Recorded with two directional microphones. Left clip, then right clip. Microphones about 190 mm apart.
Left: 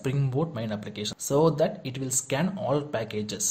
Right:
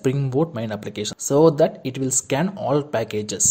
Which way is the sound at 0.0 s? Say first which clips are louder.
Right 8 dB; 30° right (ahead or behind).